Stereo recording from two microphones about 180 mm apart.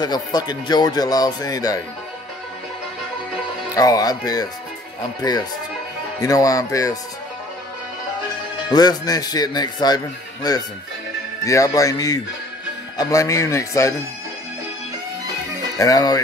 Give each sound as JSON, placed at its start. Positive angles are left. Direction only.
{"t": 0.0, "sound": "a man's voice", "side_deg": 20}
{"t": 3.7, "sound": "a man's voice", "side_deg": 20}
{"t": 8.6, "sound": "a man's voice", "side_deg": 20}
{"t": 15.8, "sound": "a man's voice", "side_deg": 20}